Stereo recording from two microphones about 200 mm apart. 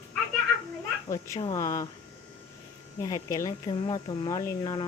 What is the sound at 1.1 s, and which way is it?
Speech, 15° left (ahead or behind).